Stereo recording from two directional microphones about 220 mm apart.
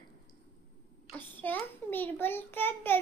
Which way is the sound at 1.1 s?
10° left (ahead or behind).